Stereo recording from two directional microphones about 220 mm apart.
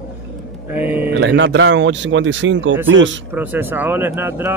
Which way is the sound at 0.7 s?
5° right (ahead or behind).